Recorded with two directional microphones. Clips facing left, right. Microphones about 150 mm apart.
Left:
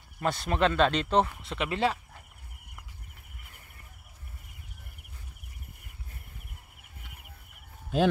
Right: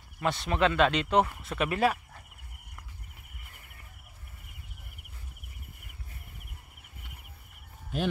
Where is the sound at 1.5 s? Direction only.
25° left (ahead or behind).